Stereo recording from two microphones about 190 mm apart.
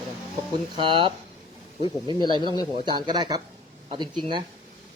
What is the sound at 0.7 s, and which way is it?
Speech, 25° right (ahead or behind).